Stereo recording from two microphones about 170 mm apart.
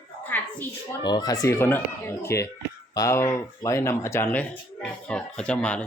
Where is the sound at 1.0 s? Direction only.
25° left (ahead or behind); by 5.9 s 5° left (ahead or behind).